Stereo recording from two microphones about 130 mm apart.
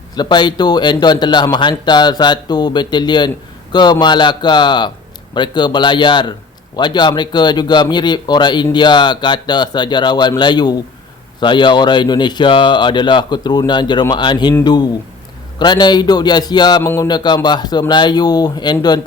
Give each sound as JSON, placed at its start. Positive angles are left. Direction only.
{"t": 0.2, "sound": "speech", "side_deg": 35}
{"t": 16.8, "sound": "music", "side_deg": 20}
{"t": 17.1, "sound": "speech", "side_deg": 35}